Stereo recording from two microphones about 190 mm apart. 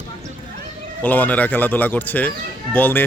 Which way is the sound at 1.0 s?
10° left (ahead or behind).